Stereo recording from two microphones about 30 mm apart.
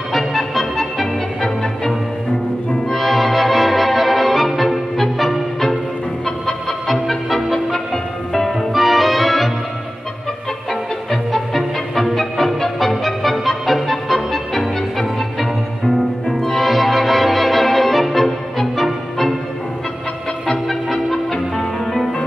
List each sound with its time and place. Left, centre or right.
0.1 s music: centre
6.9 s music: centre
7.5 s music: left
8.3 s music: centre
10.7 s music: centre
20.9 s music: centre